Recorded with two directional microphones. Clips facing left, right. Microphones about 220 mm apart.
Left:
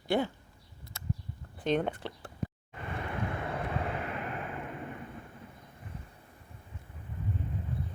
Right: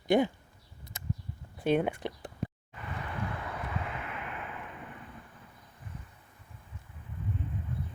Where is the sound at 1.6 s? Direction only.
10° right (ahead or behind).